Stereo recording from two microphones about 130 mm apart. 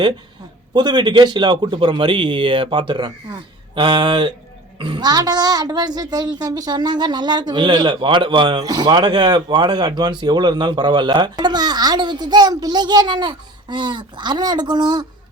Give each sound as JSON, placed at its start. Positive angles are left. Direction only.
{"t": 0.7, "sound": "a woman's voice", "side_deg": -35}